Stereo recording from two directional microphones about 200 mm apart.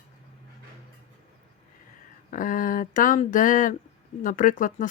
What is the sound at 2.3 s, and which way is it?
Speech, 40° left (ahead or behind).